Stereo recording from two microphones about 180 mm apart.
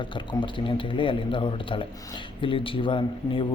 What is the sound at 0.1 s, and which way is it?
Speech, 25° left (ahead or behind).